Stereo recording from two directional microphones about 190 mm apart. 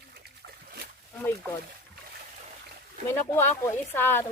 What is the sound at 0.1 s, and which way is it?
Splash, 55° right (ahead or behind).